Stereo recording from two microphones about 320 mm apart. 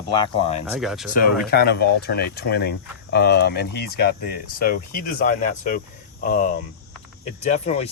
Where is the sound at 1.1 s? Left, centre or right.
Left.